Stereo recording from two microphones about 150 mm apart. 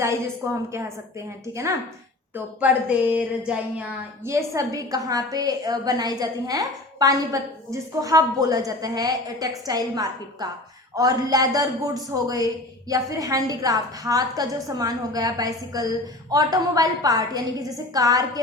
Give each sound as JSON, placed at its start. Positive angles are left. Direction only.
{"t": 0.0, "sound": "a woman's voice", "side_deg": -20}
{"t": 2.3, "sound": "a woman's voice", "side_deg": -10}